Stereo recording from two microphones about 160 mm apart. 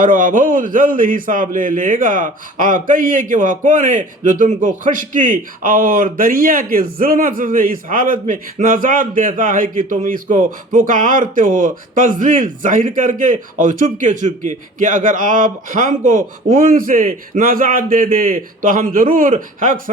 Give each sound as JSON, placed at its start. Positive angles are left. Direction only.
{"t": 0.0, "sound": "a man's voice", "side_deg": -55}